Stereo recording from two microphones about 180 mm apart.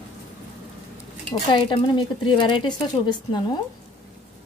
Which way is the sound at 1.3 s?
25° left (ahead or behind).